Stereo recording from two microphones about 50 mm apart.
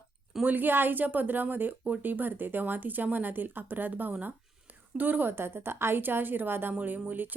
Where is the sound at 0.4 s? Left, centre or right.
Right.